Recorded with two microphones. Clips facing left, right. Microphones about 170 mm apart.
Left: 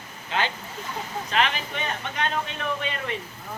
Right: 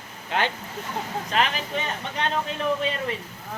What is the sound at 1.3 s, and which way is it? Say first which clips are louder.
A man's voice: right 1 dB; 40° right (ahead or behind).